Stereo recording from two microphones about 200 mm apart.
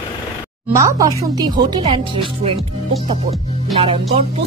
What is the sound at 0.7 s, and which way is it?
Speech, 15° right (ahead or behind).